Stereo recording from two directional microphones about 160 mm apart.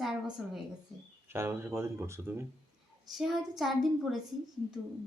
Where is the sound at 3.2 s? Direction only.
Centre (ahead or behind).